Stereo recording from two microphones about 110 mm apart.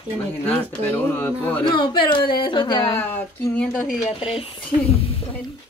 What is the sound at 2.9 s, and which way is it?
Speech, 20° left (ahead or behind).